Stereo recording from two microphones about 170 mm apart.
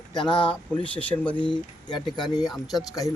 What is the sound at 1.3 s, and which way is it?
Speech, 30° left (ahead or behind).